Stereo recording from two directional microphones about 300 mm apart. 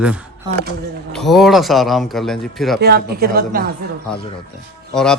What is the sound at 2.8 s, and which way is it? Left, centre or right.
Speech, right.